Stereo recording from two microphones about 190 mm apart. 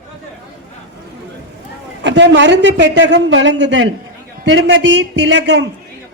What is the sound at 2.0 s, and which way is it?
A woman's voice, 70° right (ahead or behind).